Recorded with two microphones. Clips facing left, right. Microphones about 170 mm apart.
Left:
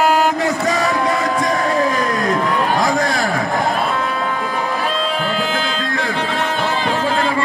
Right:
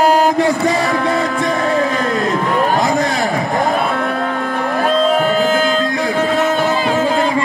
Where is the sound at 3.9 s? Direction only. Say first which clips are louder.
Right 2 dB; 55° right (ahead or behind).